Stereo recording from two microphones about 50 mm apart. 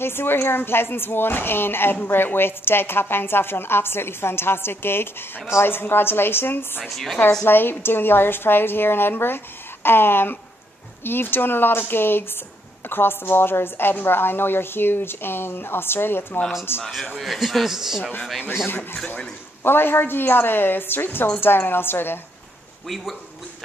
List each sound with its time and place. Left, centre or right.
0.0 s a woman's voice: left
6.9 s a man's voice: centre
7.4 s a woman's voice: left
16.8 s a man's voice: centre
19.6 s a woman's voice: left